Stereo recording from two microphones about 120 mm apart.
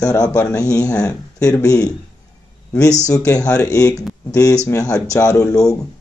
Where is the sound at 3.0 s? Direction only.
30° left (ahead or behind).